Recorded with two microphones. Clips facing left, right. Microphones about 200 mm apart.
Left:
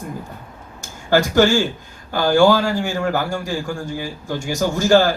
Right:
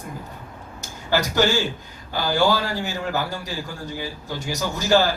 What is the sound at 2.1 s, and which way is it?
A man's voice, 50° left (ahead or behind).